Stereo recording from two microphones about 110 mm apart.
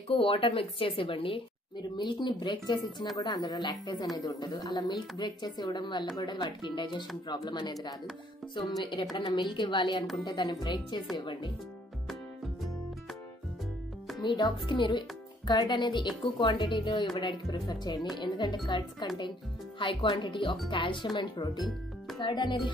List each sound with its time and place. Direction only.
0.1 s a woman's voice: 55° left (ahead or behind)
14.2 s a woman's voice: 40° left (ahead or behind)